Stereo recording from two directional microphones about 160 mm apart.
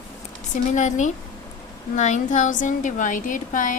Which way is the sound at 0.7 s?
50° left (ahead or behind).